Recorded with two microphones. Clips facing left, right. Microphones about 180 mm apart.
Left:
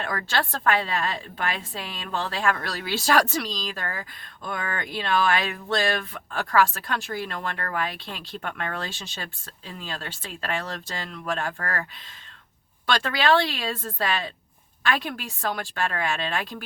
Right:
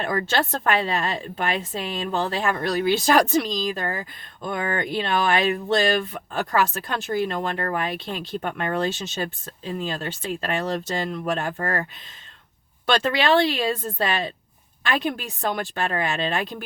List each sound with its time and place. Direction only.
0.0 s speech: 25° right (ahead or behind)